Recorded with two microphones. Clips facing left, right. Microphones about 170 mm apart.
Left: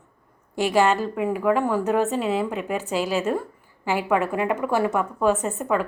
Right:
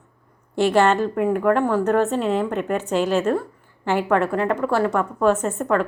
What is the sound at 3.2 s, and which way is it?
Speech, 15° left (ahead or behind).